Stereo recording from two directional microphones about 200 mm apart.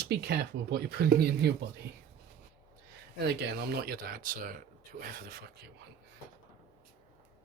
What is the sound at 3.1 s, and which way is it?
Speech, 55° right (ahead or behind).